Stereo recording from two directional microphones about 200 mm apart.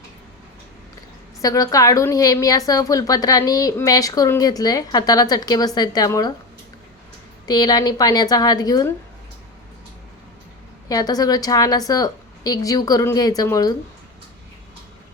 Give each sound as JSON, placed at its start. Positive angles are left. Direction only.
{"t": 1.4, "sound": "a woman's voice", "side_deg": 15}
{"t": 7.4, "sound": "a woman's voice", "side_deg": 20}
{"t": 10.8, "sound": "a woman's voice", "side_deg": 20}